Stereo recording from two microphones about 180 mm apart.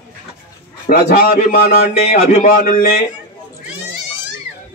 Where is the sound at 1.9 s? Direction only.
35° left (ahead or behind).